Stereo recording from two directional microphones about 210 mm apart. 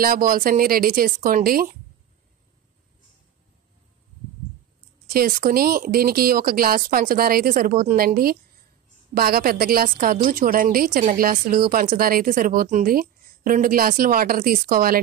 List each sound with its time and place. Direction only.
0.0 s a woman's voice: 45° right (ahead or behind)
5.0 s a woman's voice: 40° right (ahead or behind)